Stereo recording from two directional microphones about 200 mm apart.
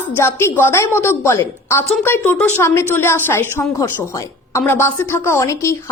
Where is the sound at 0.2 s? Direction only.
15° left (ahead or behind).